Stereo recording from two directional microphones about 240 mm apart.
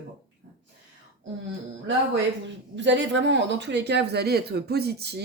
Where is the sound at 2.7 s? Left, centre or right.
Right.